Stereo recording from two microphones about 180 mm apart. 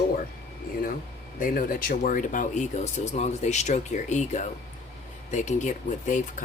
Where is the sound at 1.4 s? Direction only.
50° left (ahead or behind).